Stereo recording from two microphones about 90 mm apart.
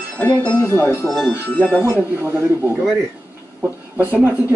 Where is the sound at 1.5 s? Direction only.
15° left (ahead or behind).